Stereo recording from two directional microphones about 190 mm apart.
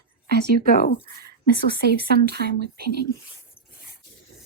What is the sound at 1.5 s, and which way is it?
Speech, 55° right (ahead or behind).